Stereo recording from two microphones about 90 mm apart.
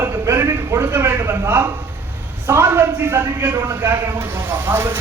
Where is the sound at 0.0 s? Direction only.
30° right (ahead or behind).